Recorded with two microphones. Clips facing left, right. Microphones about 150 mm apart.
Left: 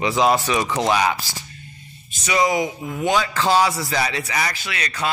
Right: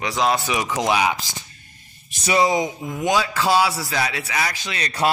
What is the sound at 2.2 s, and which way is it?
Speech, 30° right (ahead or behind).